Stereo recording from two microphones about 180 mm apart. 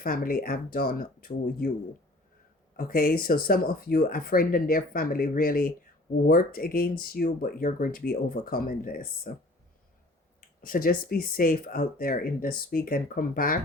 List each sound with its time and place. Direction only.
0.0 s speech: 55° left (ahead or behind)
2.7 s speech: 55° left (ahead or behind)
10.7 s speech: 50° left (ahead or behind)